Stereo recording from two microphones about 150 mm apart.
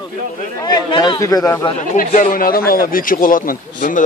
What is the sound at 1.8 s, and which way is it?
Speech, 60° left (ahead or behind).